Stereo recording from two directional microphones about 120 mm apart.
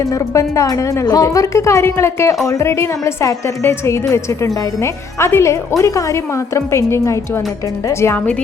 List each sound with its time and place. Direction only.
0.0 s speech: 25° left (ahead or behind)